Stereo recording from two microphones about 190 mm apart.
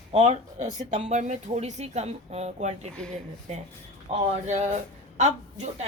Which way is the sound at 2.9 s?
5° left (ahead or behind).